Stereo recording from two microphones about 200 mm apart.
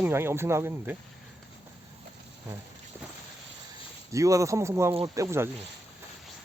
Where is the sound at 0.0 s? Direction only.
10° right (ahead or behind).